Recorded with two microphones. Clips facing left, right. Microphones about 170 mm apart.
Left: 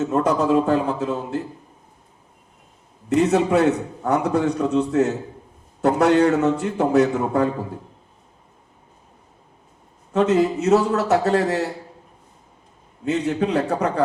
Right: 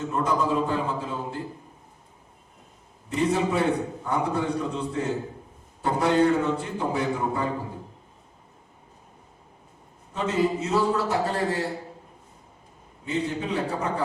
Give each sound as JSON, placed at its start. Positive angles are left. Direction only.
{"t": 0.0, "sound": "a man's voice", "side_deg": 85}
{"t": 3.1, "sound": "a man's voice", "side_deg": 90}
{"t": 10.1, "sound": "a man's voice", "side_deg": 90}
{"t": 13.1, "sound": "a man's voice", "side_deg": 85}